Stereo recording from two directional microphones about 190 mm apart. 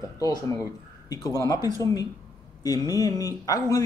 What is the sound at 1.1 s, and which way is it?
Speech, 20° left (ahead or behind).